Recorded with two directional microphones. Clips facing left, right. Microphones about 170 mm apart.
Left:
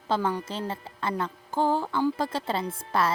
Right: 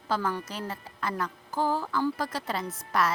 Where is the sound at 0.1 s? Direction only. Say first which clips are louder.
Left 3 dB; 25° left (ahead or behind).